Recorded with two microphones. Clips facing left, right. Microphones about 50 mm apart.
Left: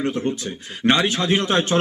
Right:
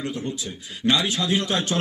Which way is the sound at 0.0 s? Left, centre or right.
Left.